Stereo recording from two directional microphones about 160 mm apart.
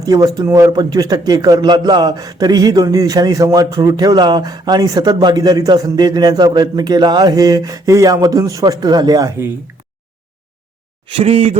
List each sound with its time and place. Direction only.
0.0 s speech: 20° right (ahead or behind)
11.2 s speech: 40° right (ahead or behind)